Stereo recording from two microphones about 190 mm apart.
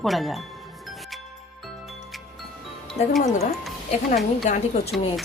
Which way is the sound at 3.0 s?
35° left (ahead or behind).